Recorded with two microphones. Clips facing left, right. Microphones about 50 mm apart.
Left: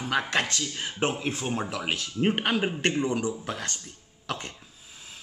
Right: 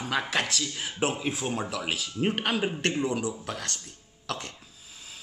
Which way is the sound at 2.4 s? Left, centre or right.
Centre.